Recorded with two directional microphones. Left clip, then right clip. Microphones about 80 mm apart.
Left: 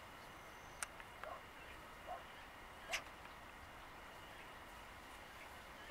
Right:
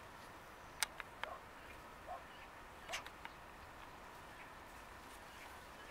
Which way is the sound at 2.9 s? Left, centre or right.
Left.